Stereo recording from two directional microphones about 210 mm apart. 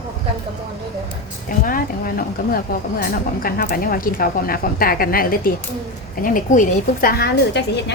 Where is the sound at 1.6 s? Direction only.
40° left (ahead or behind).